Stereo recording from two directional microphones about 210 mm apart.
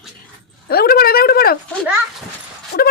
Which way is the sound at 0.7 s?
45° left (ahead or behind).